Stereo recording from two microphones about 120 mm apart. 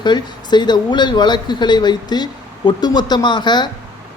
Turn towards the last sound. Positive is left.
turn(degrees=40)  # may be behind; listen again after turning